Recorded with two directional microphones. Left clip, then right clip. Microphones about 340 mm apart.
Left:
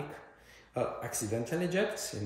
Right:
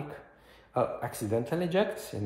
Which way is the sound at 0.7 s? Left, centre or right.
Centre.